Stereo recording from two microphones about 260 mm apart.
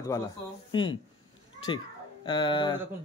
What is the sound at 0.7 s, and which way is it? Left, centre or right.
Speech, centre.